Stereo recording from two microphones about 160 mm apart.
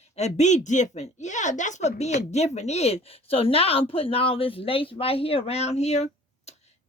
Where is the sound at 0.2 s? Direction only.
45° left (ahead or behind).